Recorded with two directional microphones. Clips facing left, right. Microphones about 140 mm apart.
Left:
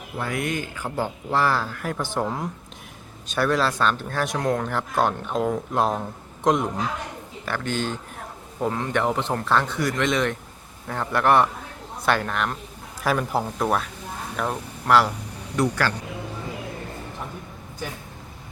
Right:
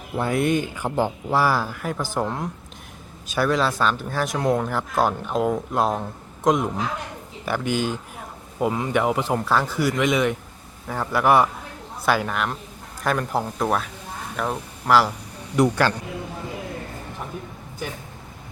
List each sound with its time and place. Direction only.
0.2 s speech: 25° right (ahead or behind); by 6.7 s centre (ahead or behind)
7.4 s speech: 10° right (ahead or behind)
15.5 s speech: 20° right (ahead or behind)